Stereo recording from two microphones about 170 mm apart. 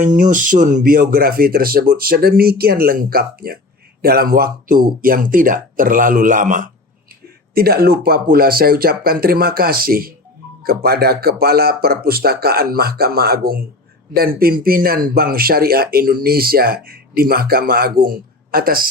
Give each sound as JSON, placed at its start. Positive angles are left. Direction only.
{"t": 0.0, "sound": "speech", "side_deg": -50}
{"t": 7.5, "sound": "speech", "side_deg": -65}